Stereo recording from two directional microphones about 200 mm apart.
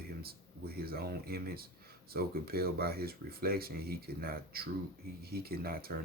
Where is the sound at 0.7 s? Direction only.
50° right (ahead or behind).